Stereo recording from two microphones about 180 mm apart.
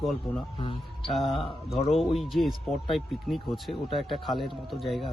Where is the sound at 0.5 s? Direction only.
30° left (ahead or behind).